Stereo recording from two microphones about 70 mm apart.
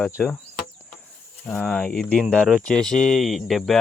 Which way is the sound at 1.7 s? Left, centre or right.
Centre.